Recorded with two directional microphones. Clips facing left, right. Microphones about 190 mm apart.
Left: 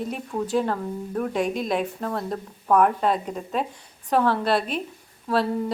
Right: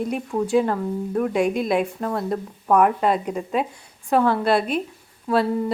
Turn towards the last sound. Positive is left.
turn(degrees=-10)  # may be behind; listen again after turning